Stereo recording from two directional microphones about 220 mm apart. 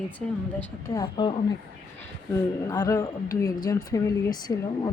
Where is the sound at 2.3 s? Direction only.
15° left (ahead or behind).